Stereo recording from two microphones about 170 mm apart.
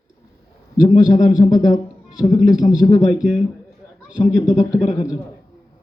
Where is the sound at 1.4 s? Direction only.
20° left (ahead or behind).